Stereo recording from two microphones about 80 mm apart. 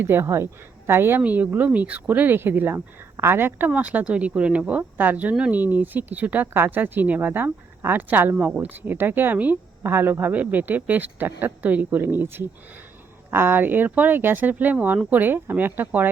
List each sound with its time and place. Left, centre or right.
0.0 s a woman's voice: right
3.7 s speech: centre